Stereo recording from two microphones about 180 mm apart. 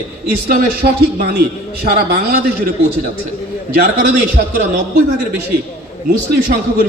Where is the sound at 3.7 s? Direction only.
55° right (ahead or behind).